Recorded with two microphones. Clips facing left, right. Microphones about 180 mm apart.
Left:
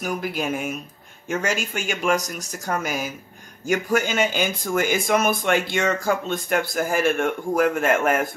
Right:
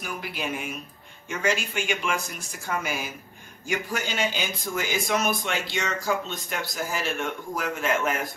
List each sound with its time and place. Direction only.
0.0 s speech: 45° left (ahead or behind)